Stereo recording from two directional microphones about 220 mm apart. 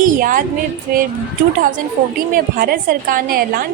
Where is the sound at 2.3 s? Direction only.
40° right (ahead or behind).